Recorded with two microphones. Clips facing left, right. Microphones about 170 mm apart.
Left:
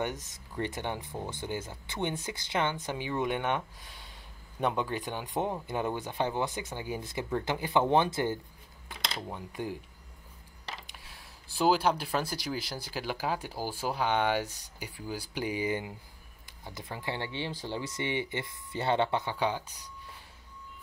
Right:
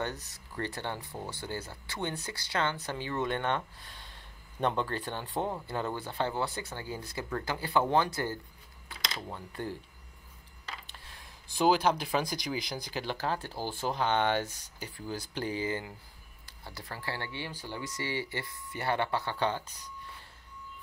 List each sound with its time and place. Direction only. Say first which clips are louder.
0.0 s speech: left 2 dB; 15° left (ahead or behind)
10.9 s a sound: even; 5° left (ahead or behind)
11.5 s speech: even; 5° left (ahead or behind)